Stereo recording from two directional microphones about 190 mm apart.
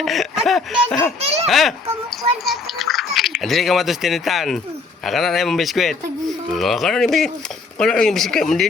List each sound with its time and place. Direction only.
0.0 s speech: centre (ahead or behind)
1.2 s a child's voice: 30° right (ahead or behind)
1.5 s speech: centre (ahead or behind)